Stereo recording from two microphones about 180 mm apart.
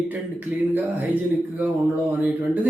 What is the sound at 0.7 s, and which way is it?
Speech, 10° right (ahead or behind).